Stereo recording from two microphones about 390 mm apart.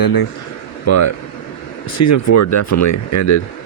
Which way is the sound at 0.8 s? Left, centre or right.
Left.